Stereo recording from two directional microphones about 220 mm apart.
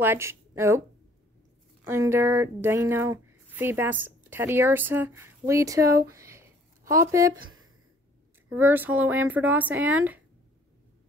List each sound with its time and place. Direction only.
0.0 s speech: 10° right (ahead or behind)
1.9 s speech: 10° right (ahead or behind)
7.3 s a sound: 65° right (ahead or behind)
8.5 s speech: 10° right (ahead or behind)